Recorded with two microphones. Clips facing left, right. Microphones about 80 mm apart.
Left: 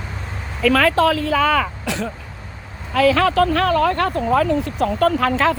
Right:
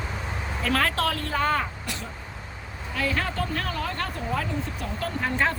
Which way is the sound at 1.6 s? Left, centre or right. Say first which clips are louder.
Left 9 dB; left.